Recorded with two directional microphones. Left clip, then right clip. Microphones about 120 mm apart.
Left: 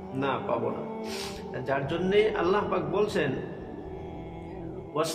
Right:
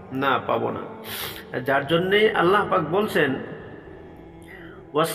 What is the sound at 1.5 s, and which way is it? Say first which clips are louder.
A man's voice: right 9 dB; 35° right (ahead or behind).